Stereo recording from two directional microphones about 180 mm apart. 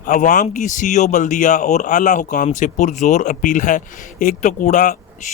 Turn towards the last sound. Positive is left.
turn(degrees=45)  # may be behind; listen again after turning